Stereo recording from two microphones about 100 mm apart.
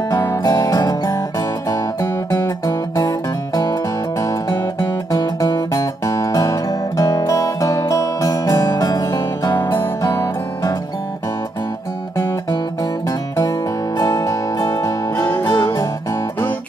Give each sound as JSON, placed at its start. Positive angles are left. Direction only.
{"t": 0.1, "sound": "music", "side_deg": 25}
{"t": 0.4, "sound": "music", "side_deg": 40}
{"t": 13.4, "sound": "music", "side_deg": 40}